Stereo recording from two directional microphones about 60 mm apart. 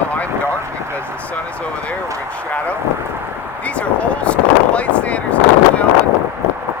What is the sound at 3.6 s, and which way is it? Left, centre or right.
Vehicle, left.